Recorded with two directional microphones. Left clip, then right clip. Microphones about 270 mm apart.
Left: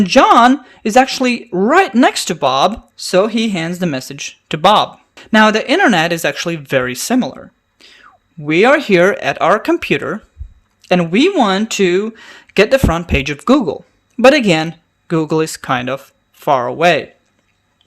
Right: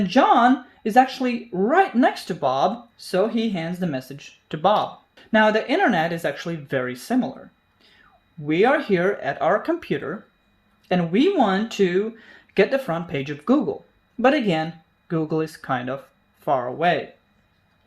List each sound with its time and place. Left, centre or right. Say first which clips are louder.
0.0 s speech: left 8 dB; left